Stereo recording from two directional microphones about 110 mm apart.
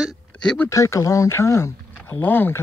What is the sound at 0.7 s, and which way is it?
Speech, 30° left (ahead or behind).